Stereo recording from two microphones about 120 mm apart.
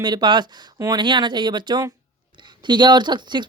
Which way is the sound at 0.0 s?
35° right (ahead or behind).